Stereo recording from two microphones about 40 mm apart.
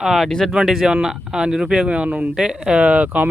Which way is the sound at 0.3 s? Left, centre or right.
Centre.